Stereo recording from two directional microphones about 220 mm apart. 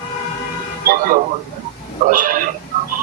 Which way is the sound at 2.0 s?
35° right (ahead or behind).